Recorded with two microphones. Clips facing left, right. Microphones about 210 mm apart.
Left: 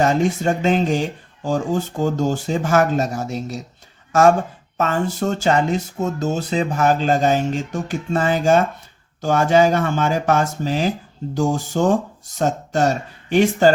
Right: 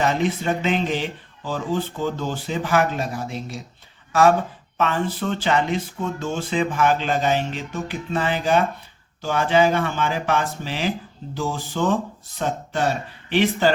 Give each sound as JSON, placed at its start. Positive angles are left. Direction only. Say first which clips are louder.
{"t": 0.0, "sound": "speech", "louder": "left 4 dB", "side_deg": 45}